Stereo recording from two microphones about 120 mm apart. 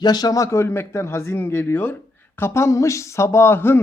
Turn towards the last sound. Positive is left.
turn(degrees=20)  # may be behind; listen again after turning